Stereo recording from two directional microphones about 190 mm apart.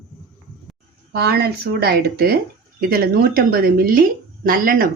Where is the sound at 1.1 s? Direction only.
60° right (ahead or behind).